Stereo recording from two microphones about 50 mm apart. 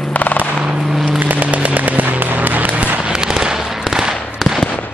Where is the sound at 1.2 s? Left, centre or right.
Right; by 4.2 s centre.